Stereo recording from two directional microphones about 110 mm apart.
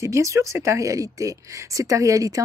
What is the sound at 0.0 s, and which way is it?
Speech, 30° right (ahead or behind).